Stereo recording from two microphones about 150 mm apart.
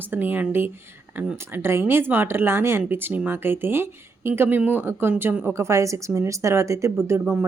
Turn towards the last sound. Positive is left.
turn(degrees=-15)  # may be behind; listen again after turning